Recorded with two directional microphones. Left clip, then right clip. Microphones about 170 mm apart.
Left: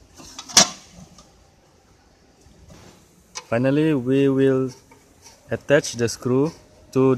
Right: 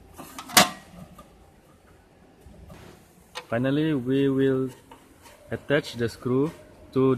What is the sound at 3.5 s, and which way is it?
Speech, 40° left (ahead or behind).